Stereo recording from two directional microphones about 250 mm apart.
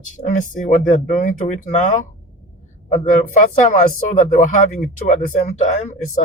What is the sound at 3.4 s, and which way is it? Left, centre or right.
Speech, left.